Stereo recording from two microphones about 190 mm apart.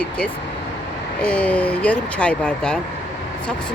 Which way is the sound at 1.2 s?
5° left (ahead or behind).